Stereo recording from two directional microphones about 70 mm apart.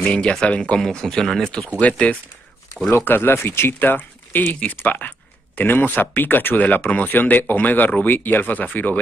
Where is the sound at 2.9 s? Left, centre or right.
Left.